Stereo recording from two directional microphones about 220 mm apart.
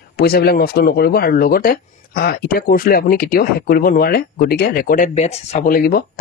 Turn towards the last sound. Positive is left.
turn(degrees=45)  # may be behind; listen again after turning